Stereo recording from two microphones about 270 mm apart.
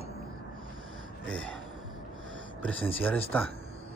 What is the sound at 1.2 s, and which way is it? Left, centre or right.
Speech, centre.